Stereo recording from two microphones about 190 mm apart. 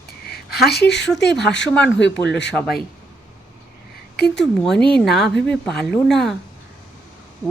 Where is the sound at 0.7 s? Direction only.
60° left (ahead or behind).